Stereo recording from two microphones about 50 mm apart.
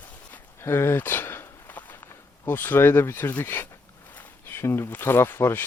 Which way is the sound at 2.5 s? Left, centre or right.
Left.